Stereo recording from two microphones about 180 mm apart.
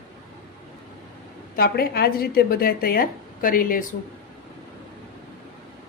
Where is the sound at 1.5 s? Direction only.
60° left (ahead or behind).